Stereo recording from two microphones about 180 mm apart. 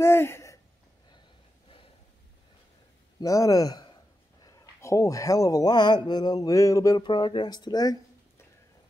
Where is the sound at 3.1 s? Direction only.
20° left (ahead or behind).